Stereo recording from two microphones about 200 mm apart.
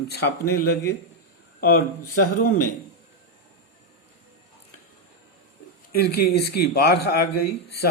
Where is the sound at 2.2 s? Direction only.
45° left (ahead or behind).